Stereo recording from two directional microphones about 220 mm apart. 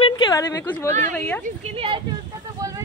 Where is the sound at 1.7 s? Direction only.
25° right (ahead or behind).